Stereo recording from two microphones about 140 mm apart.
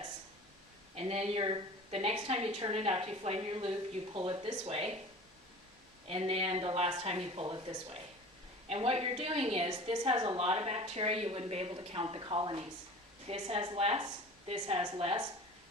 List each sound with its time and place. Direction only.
0.9 s a woman's voice: 50° right (ahead or behind)
6.1 s a woman's voice: 45° right (ahead or behind)
7.4 s speech: 30° right (ahead or behind)
8.7 s a woman's voice: 45° right (ahead or behind)
13.2 s a woman's voice: 45° right (ahead or behind)